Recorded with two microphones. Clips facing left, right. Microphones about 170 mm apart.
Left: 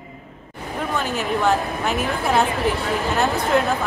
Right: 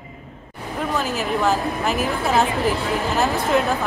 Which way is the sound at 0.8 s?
Centre (ahead or behind).